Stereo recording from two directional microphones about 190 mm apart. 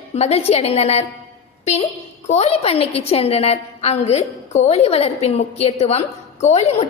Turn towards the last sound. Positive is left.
turn(degrees=35)  # may be behind; listen again after turning